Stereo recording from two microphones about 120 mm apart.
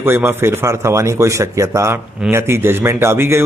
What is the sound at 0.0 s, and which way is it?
Speech, 20° right (ahead or behind).